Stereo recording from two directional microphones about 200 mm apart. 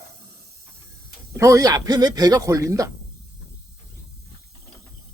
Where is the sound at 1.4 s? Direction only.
15° right (ahead or behind).